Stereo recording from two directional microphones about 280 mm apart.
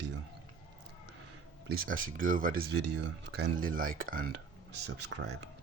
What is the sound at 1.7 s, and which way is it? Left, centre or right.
Speech, right.